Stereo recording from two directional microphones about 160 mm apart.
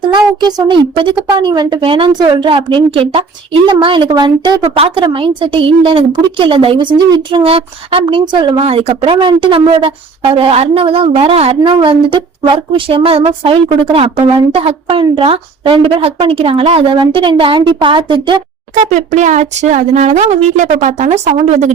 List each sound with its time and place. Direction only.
0.1 s speech: 25° right (ahead or behind)
8.6 s speech: 40° right (ahead or behind)
18.9 s speech: 50° right (ahead or behind)